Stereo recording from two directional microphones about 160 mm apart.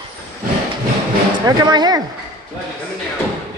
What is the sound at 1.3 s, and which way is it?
Speech, 25° right (ahead or behind).